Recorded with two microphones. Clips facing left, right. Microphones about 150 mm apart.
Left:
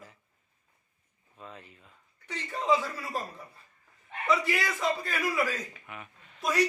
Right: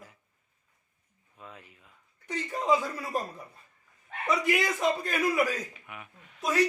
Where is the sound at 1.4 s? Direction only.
10° right (ahead or behind).